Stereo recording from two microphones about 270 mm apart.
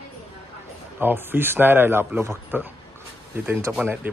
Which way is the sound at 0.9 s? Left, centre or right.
Centre.